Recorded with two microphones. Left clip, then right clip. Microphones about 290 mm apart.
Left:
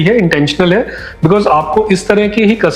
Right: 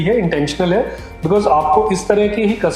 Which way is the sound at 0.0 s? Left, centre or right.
Left.